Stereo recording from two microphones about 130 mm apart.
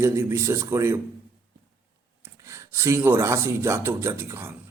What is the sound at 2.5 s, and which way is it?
A man's voice, 20° right (ahead or behind).